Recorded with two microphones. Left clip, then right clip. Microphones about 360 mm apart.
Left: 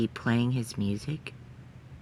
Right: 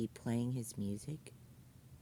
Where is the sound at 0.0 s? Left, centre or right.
Right.